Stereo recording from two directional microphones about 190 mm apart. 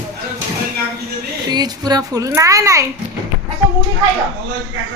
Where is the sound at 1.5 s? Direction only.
20° right (ahead or behind).